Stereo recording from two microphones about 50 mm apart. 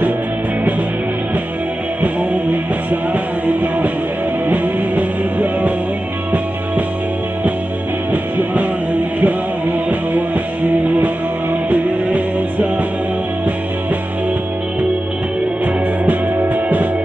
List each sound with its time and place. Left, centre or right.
2.5 s music: right
8.1 s music: right
15.6 s music: right